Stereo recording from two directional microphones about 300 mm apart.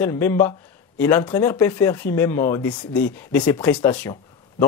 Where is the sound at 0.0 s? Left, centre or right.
Centre.